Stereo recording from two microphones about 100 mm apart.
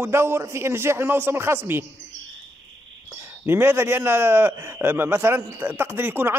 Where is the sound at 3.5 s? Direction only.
25° right (ahead or behind).